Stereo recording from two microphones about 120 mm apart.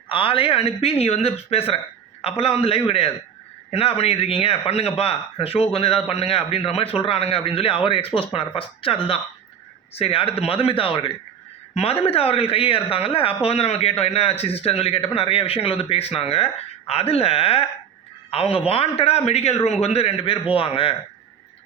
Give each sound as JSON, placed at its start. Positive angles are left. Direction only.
{"t": 0.1, "sound": "speech", "side_deg": 45}